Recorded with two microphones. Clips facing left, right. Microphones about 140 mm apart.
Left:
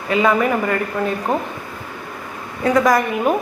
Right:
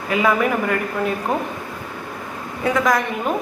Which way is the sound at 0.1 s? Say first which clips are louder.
Left 2 dB; 5° right (ahead or behind).